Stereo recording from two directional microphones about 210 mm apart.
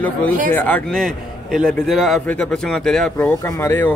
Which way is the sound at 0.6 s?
5° left (ahead or behind).